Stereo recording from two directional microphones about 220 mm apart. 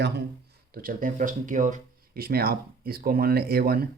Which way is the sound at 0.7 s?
40° right (ahead or behind).